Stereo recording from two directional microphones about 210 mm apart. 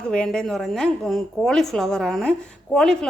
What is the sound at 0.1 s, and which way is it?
A woman's voice, 5° left (ahead or behind).